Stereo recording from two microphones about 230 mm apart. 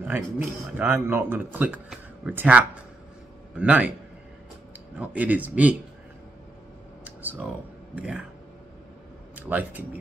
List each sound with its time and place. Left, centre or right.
0.0 s speech: centre
4.9 s speech: centre
7.1 s a sound: centre
7.9 s speech: centre
9.3 s speech: centre